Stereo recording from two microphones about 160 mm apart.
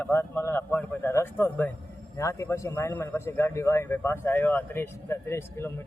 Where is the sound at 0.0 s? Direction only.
15° left (ahead or behind).